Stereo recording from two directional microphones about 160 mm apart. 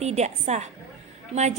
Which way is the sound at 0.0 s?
45° right (ahead or behind).